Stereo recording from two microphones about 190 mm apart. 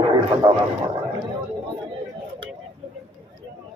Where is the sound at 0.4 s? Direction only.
20° right (ahead or behind).